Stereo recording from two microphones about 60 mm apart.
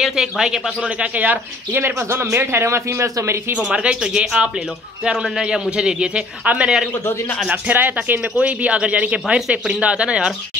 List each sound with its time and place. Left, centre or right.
0.0 s a man's voice: centre
0.7 s speech: right
3.7 s a man's voice: centre
6.9 s a man's voice: left
7.5 s a man's voice: right